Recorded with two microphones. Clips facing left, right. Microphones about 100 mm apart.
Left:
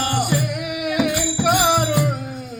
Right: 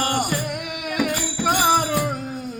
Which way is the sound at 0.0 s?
45° right (ahead or behind).